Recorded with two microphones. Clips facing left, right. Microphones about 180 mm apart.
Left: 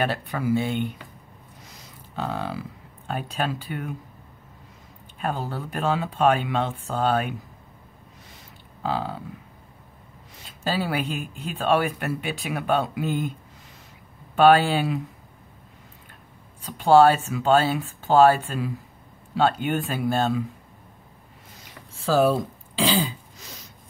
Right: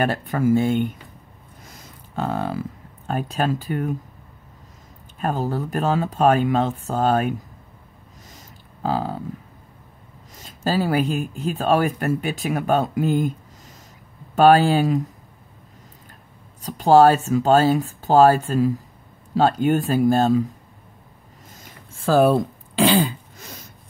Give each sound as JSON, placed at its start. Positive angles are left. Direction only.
{"t": 0.0, "sound": "speech", "side_deg": -45}
{"t": 5.2, "sound": "speech", "side_deg": -40}
{"t": 8.8, "sound": "speech", "side_deg": -40}
{"t": 10.3, "sound": "speech", "side_deg": -40}
{"t": 14.3, "sound": "speech", "side_deg": -40}
{"t": 16.6, "sound": "speech", "side_deg": -40}
{"t": 21.6, "sound": "throat clearing", "side_deg": -50}